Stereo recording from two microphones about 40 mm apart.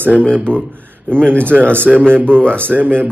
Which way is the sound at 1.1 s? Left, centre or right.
Right.